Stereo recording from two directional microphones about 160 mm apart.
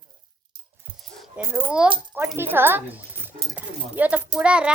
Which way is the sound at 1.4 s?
15° right (ahead or behind).